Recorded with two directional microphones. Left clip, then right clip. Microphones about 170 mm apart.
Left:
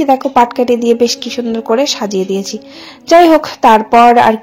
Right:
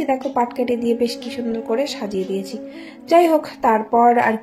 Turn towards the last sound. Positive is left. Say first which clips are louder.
# left 8 dB
turn(degrees=30)  # may be behind; listen again after turning